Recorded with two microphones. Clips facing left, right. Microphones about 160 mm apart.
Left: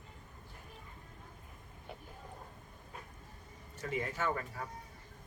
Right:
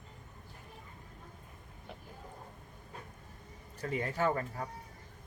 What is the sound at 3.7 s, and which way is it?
Speech, 35° right (ahead or behind).